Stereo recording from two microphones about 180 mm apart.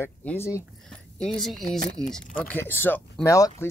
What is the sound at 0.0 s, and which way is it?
Speech, 10° left (ahead or behind).